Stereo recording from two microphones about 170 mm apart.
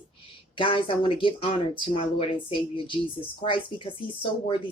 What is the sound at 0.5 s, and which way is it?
Speech, 30° left (ahead or behind).